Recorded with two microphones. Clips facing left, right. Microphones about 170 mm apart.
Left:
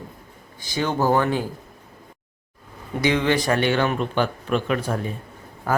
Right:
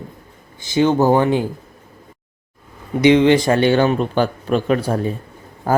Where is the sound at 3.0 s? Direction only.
20° right (ahead or behind).